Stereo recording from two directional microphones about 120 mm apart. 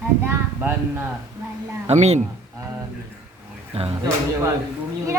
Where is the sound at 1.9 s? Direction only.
70° right (ahead or behind).